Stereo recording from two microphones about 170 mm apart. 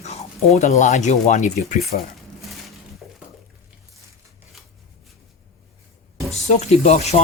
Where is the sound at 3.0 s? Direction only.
Centre (ahead or behind).